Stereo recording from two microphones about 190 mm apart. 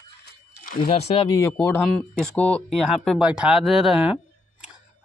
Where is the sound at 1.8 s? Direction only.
5° left (ahead or behind).